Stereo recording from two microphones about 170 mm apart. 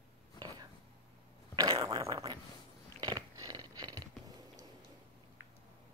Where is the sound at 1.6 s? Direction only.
20° right (ahead or behind).